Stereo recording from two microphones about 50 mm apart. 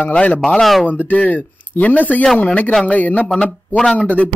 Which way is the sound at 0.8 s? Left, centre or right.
Left.